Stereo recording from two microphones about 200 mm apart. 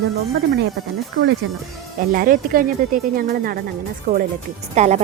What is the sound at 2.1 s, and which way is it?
Speech, 45° right (ahead or behind).